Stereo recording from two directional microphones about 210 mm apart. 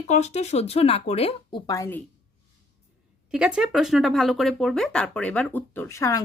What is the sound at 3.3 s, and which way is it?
A woman's voice, 5° right (ahead or behind).